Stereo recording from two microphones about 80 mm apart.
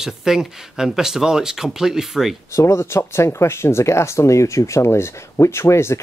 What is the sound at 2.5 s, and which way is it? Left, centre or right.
Speech, left.